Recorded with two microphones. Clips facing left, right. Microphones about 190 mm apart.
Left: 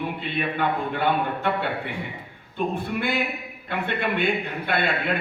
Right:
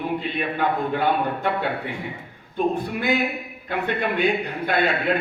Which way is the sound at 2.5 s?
40° right (ahead or behind).